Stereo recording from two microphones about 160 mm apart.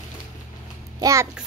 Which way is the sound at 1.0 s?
20° right (ahead or behind).